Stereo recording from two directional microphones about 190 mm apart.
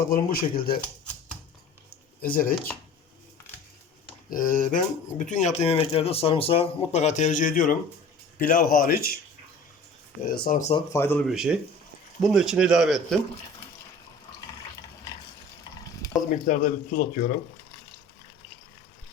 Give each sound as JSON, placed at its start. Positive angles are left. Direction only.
{"t": 0.1, "sound": "speech", "side_deg": 50}
{"t": 2.2, "sound": "speech", "side_deg": 50}
{"t": 4.3, "sound": "speech", "side_deg": 45}
{"t": 10.3, "sound": "speech", "side_deg": 50}
{"t": 10.6, "sound": "speech", "side_deg": 30}
{"t": 10.9, "sound": "speech", "side_deg": 10}
{"t": 11.3, "sound": "a man's voice", "side_deg": -5}
{"t": 16.0, "sound": "a sound", "side_deg": 15}
{"t": 16.5, "sound": "speech", "side_deg": 45}